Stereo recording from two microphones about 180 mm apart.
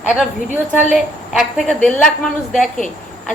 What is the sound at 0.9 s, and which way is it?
A woman's voice, 5° right (ahead or behind).